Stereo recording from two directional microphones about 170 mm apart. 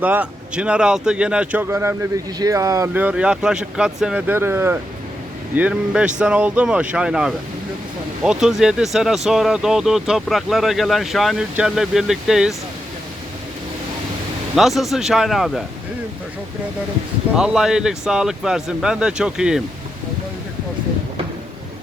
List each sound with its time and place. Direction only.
0.0 s speech: 10° right (ahead or behind)
14.5 s speech: centre (ahead or behind)
17.3 s speech: 5° right (ahead or behind)